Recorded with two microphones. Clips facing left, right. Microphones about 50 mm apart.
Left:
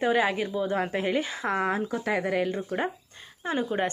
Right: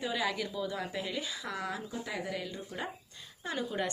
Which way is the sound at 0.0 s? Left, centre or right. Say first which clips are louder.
Left 10 dB; left.